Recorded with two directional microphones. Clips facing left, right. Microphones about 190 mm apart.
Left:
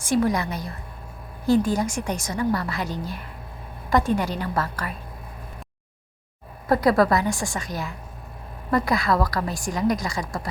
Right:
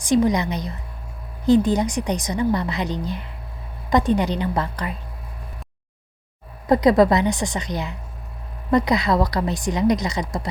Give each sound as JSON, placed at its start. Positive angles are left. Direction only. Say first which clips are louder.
{"t": 0.0, "sound": "a woman's voice", "louder": "right 3 dB", "side_deg": -15}
{"t": 6.7, "sound": "a woman's voice", "louder": "right 4 dB", "side_deg": -20}
{"t": 8.7, "sound": "a woman's voice", "louder": "right 3 dB", "side_deg": -20}